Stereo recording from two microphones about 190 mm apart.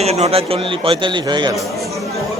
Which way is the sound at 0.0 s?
35° right (ahead or behind).